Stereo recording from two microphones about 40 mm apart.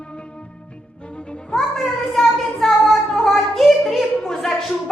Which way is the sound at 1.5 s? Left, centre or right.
Centre.